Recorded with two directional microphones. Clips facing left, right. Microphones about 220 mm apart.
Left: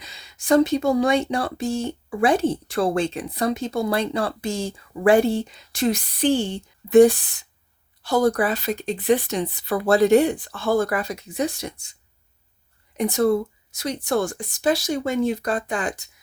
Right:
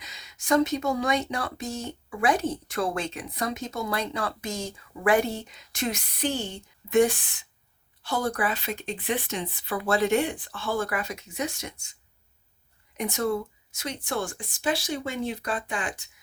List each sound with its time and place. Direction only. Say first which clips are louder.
0.0 s speech: left 3 dB; 30° left (ahead or behind)
13.0 s speech: left 8 dB; 35° left (ahead or behind)